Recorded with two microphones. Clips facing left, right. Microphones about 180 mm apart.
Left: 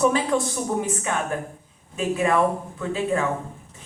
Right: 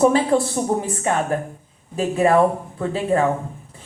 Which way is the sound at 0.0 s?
35° right (ahead or behind).